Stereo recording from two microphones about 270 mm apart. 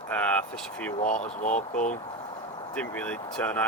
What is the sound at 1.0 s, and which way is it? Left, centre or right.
Speech, left.